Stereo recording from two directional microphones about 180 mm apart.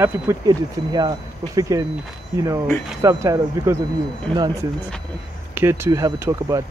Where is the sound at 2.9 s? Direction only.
20° right (ahead or behind).